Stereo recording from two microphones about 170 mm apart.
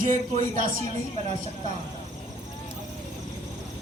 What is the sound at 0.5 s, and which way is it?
Speech, 55° right (ahead or behind).